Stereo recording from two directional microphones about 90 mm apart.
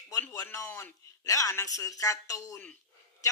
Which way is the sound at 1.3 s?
40° left (ahead or behind).